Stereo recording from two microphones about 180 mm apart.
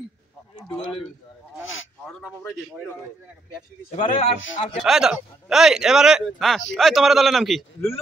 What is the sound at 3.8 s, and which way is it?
Speech, 40° left (ahead or behind).